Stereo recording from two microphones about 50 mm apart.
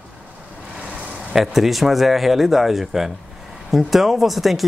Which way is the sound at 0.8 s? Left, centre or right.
Right.